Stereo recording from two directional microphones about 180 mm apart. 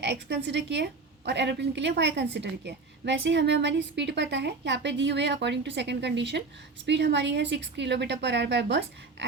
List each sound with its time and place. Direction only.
0.0 s a woman's voice: 70° right (ahead or behind)